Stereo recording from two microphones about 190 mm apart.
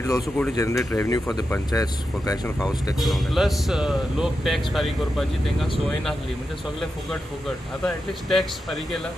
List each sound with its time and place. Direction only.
0.0 s speech: 15° left (ahead or behind)
3.0 s speech: centre (ahead or behind)
7.8 s speech: centre (ahead or behind)